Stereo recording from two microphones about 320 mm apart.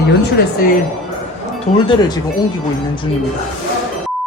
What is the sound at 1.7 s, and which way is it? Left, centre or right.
Speech, centre.